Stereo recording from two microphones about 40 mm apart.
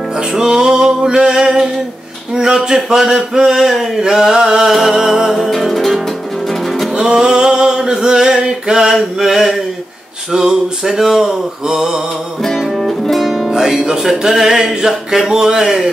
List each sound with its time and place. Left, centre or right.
0.3 s music: centre
5.3 s music: centre
6.9 s music: centre
8.9 s music: centre
10.3 s a sound: centre
10.8 s music: centre
12.4 s music: centre
13.3 s music: centre
13.6 s music: centre